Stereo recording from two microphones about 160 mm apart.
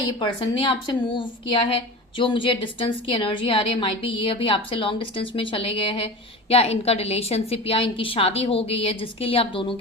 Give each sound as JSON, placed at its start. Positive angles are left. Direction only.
{"t": 0.2, "sound": "a woman's voice", "side_deg": 30}